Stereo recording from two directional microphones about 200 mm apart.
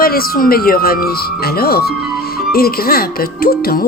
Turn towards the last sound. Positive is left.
turn(degrees=50)  # may be behind; listen again after turning